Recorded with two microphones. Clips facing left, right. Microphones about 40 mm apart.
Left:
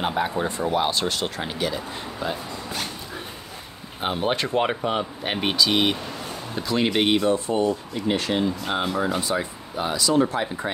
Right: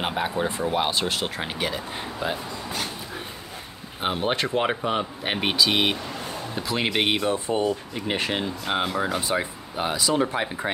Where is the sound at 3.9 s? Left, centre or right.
Centre.